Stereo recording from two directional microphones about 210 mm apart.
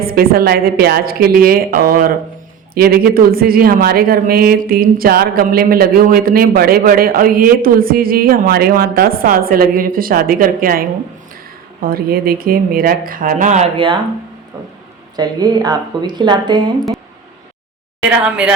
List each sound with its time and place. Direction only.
0.0 s speech: 45° right (ahead or behind); by 13.9 s 25° right (ahead or behind)
15.1 s a woman's voice: 20° right (ahead or behind)